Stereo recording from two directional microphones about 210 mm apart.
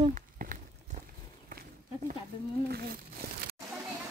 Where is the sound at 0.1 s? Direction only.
40° right (ahead or behind).